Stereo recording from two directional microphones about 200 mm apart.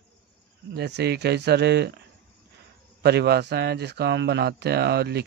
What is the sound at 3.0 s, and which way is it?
Speech, 55° right (ahead or behind).